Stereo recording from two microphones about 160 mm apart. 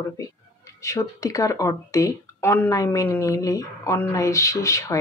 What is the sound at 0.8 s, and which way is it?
Speech, 20° left (ahead or behind).